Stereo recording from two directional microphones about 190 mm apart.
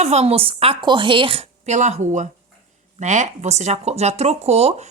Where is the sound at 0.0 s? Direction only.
35° right (ahead or behind).